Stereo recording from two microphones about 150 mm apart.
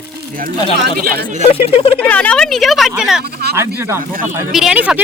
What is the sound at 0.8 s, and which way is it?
Speech, 85° right.